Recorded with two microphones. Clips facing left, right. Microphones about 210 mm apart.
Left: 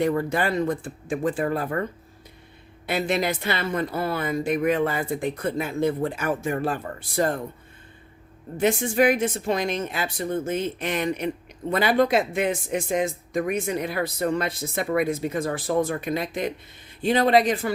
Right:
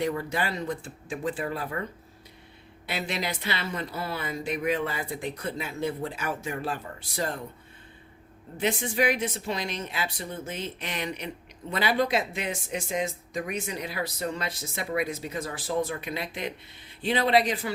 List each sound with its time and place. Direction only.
0.0 s speech: 50° left (ahead or behind)
8.5 s speech: 50° left (ahead or behind)